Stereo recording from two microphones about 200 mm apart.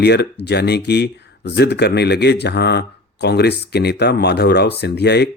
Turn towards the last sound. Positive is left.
turn(degrees=55)  # may be behind; listen again after turning